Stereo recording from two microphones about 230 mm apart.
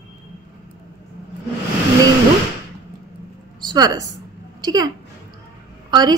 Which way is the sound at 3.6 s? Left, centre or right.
Centre.